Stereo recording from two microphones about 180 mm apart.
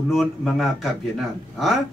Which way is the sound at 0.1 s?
Centre (ahead or behind).